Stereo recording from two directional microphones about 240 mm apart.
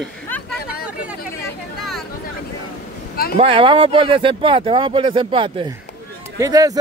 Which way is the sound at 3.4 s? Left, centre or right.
Right.